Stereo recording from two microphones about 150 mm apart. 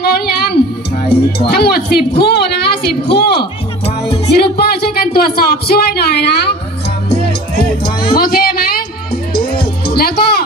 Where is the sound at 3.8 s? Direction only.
40° left (ahead or behind).